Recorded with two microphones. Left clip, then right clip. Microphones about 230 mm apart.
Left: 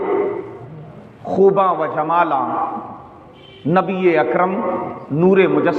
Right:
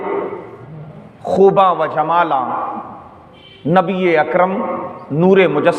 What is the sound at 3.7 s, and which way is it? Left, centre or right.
A man's voice, right.